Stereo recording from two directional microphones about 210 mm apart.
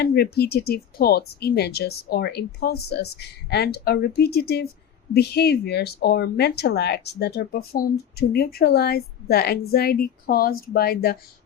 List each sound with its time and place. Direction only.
0.0 s speech: 50° left (ahead or behind)